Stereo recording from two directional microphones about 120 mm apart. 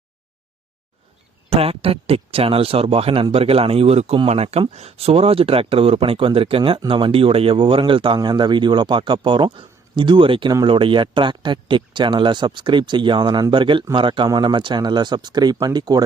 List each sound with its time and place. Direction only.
1.5 s speech: 55° right (ahead or behind)
4.4 s speech: 45° right (ahead or behind)
4.7 s speech: 60° right (ahead or behind); by 16.0 s 35° right (ahead or behind)